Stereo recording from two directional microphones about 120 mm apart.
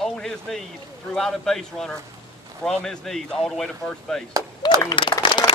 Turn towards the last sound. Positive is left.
turn(degrees=40)  # may be behind; listen again after turning